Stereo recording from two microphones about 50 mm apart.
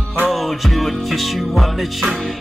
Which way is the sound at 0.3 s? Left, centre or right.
Centre.